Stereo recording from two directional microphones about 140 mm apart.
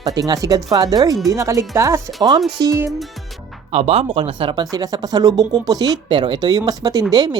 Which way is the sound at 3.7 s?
45° right (ahead or behind).